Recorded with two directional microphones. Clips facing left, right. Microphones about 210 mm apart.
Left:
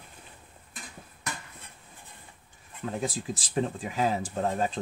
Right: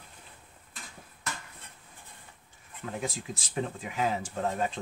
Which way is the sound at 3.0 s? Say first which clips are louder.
Left 4 dB; 35° left (ahead or behind).